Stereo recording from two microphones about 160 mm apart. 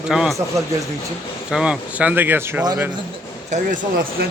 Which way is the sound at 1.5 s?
5° right (ahead or behind).